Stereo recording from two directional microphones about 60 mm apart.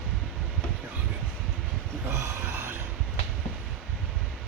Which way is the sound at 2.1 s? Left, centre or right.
Right.